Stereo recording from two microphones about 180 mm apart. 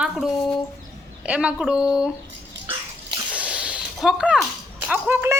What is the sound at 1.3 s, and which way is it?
Speech, 5° right (ahead or behind).